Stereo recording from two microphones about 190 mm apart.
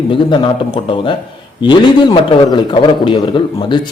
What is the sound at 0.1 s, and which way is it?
A man's voice, 25° left (ahead or behind).